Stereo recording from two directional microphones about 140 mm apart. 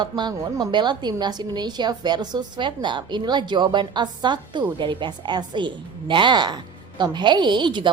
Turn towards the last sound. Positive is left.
turn(degrees=-35)  # may be behind; listen again after turning